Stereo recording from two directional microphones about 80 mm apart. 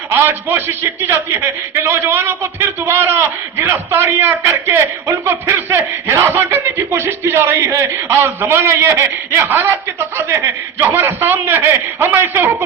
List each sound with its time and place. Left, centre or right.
0.1 s a man's voice: right
10.8 s a man's voice: right